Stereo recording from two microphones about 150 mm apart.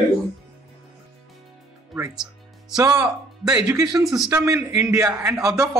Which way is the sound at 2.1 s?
5° right (ahead or behind).